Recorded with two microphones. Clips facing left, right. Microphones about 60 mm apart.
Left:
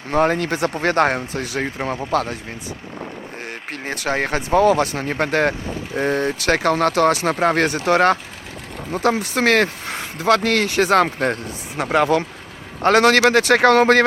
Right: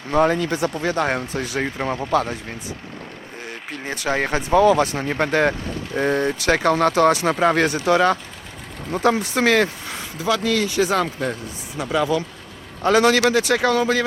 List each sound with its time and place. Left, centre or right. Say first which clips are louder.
0.1 s speech: even; left
1.9 s speech: even; centre
3.7 s speech: even; left
5.6 s speech: even; centre
6.4 s speech: even; left
9.2 s speech: left 1 dB; left